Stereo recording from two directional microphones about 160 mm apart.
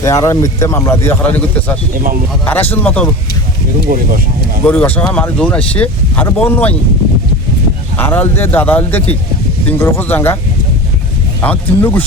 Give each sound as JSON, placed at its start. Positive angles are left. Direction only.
{"t": 0.0, "sound": "speech", "side_deg": 20}
{"t": 3.9, "sound": "speech", "side_deg": -65}
{"t": 4.6, "sound": "speech", "side_deg": 10}
{"t": 7.9, "sound": "speech", "side_deg": 10}
{"t": 11.3, "sound": "speech", "side_deg": 10}